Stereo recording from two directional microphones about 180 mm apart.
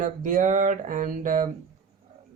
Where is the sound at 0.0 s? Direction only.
45° right (ahead or behind).